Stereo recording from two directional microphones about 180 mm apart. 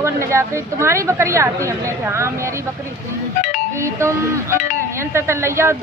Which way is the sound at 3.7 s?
15° right (ahead or behind).